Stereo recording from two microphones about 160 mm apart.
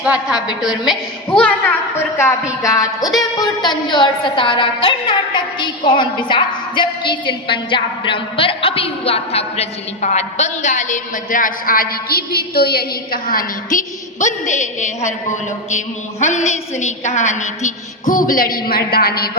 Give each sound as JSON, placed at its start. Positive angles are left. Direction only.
{"t": 0.0, "sound": "a woman's voice", "side_deg": -5}
{"t": 0.9, "sound": "a woman's voice", "side_deg": 5}